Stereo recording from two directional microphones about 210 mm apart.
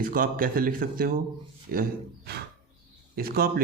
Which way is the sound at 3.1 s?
45° right (ahead or behind).